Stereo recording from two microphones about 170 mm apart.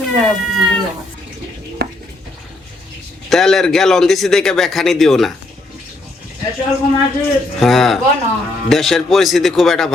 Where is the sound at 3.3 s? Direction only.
Centre (ahead or behind).